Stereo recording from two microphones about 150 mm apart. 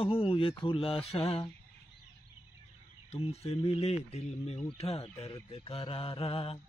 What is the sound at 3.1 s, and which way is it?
Speech, 40° left (ahead or behind).